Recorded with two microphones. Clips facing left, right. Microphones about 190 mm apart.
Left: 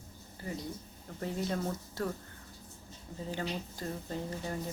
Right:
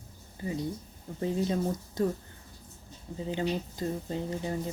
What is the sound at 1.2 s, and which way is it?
Speech, 15° right (ahead or behind).